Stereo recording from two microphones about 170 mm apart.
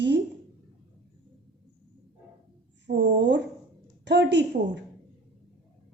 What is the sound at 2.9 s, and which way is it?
A woman's voice, 90° right.